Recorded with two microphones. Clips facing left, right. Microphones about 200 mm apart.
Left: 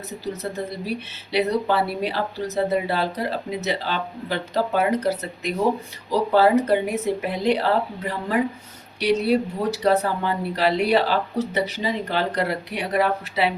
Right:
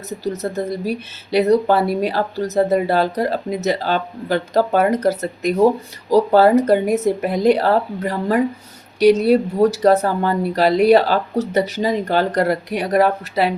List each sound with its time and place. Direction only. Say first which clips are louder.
0.5 s speech: right 6 dB; 45° right (ahead or behind)